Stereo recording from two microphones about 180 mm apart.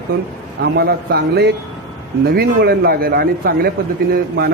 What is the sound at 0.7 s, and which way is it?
A man's voice, 60° right (ahead or behind).